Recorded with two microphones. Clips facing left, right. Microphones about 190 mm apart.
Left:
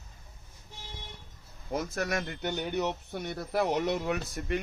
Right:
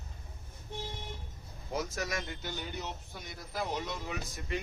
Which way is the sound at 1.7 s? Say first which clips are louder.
Left 4 dB; 55° left (ahead or behind).